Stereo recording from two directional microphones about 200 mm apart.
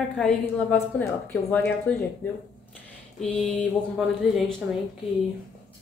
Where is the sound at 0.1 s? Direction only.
5° left (ahead or behind).